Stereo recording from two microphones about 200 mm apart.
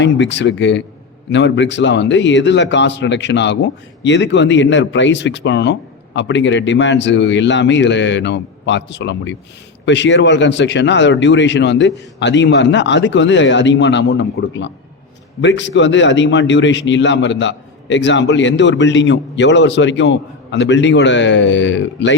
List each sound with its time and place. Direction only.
0.0 s a man's voice: 60° left (ahead or behind)